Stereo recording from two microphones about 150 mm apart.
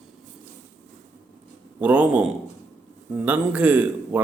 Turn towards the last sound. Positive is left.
turn(degrees=-10)  # may be behind; listen again after turning